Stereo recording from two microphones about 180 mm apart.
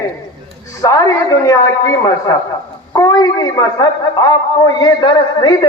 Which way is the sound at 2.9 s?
20° left (ahead or behind).